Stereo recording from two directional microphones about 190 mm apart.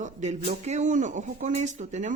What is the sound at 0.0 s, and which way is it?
Speech, 35° right (ahead or behind).